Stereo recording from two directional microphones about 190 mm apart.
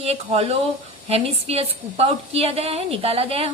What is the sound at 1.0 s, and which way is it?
A woman's voice, 30° right (ahead or behind).